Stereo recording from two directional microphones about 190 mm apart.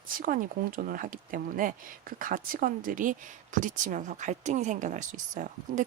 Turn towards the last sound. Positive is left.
turn(degrees=-40)  # may be behind; listen again after turning